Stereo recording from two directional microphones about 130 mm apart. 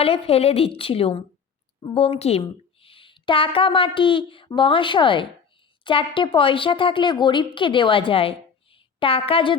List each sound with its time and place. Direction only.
0.0 s a woman's voice: 50° left (ahead or behind)